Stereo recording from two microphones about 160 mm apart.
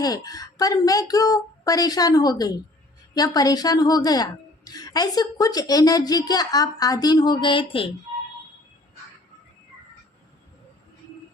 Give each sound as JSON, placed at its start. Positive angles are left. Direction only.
{"t": 0.0, "sound": "a woman's voice", "side_deg": 25}